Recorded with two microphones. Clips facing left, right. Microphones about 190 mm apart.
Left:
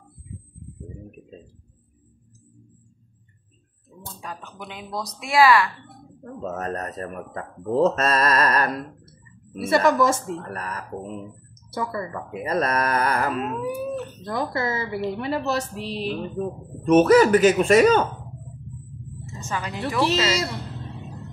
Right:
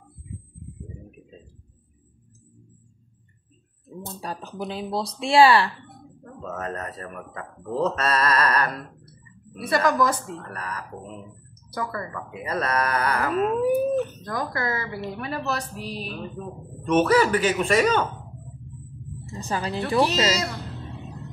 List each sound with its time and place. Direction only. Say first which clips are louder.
4.2 s speech: right 5 dB; 35° right (ahead or behind)
6.2 s speech: left 3 dB; 40° left (ahead or behind)
9.6 s speech: left 3 dB; 25° left (ahead or behind)
10.4 s speech: left 2 dB; 40° left (ahead or behind)
11.7 s speech: left 2 dB; 25° left (ahead or behind)
12.4 s a sound: left 2 dB; 40° left (ahead or behind)
13.4 s speech: right 6 dB; 40° right (ahead or behind)
14.2 s speech: left 2 dB; 25° left (ahead or behind); by 18.0 s 40° left (ahead or behind)
19.2 s speech: right 2 dB; 35° right (ahead or behind)